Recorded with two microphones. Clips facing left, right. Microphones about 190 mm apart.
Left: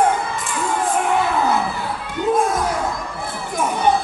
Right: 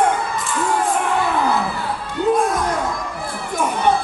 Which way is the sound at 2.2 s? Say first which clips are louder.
Right 2 dB; 15° left (ahead or behind).